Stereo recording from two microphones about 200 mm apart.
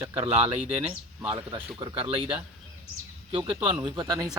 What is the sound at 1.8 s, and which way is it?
Speech, 30° right (ahead or behind).